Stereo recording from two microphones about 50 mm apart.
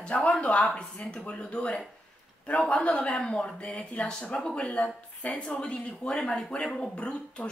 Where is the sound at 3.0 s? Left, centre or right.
Centre.